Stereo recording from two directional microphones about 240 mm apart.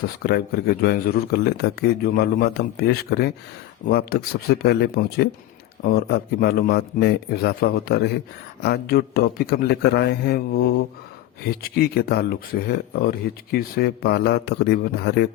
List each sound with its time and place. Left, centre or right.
0.2 s speech: left